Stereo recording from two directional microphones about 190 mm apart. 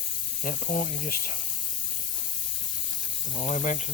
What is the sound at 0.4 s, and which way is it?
Speech, 45° left (ahead or behind).